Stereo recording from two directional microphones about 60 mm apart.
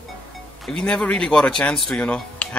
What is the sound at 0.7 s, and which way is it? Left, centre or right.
Speech, centre.